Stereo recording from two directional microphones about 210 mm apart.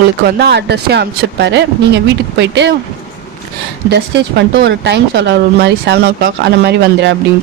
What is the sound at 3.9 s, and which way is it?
Speech, 55° right (ahead or behind).